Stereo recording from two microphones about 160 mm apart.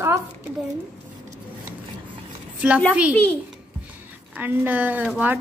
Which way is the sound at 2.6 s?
10° right (ahead or behind).